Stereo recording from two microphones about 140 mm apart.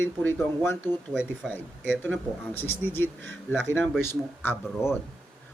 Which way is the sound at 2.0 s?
10° left (ahead or behind).